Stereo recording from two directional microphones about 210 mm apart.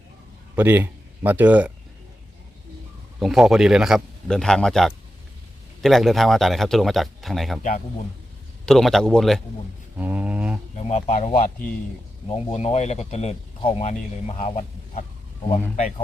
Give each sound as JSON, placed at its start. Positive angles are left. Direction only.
{"t": 0.5, "sound": "speech", "side_deg": -10}
{"t": 3.2, "sound": "a man's voice", "side_deg": 0}
{"t": 8.6, "sound": "a man's voice", "side_deg": 0}
{"t": 10.0, "sound": "a sound", "side_deg": -5}
{"t": 10.8, "sound": "speech", "side_deg": 30}